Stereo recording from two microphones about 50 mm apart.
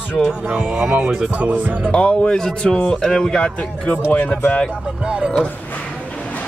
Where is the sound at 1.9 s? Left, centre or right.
Left.